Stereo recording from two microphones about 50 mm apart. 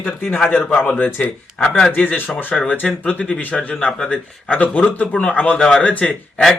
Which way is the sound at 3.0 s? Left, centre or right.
Left.